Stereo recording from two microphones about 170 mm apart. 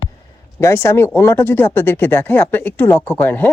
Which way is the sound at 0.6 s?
15° left (ahead or behind).